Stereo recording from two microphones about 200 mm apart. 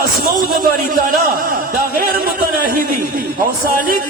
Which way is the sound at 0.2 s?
45° right (ahead or behind).